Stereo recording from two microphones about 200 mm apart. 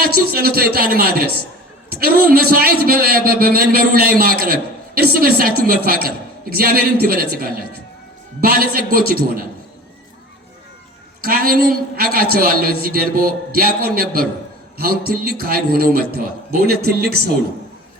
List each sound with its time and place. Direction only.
0.0 s a man's voice: 50° right (ahead or behind)
11.2 s a man's voice: 45° right (ahead or behind)